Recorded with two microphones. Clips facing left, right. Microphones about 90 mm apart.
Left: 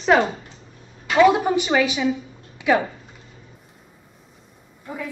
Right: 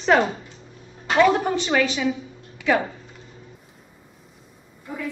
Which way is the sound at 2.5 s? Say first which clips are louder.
Left 2 dB; 20° left (ahead or behind).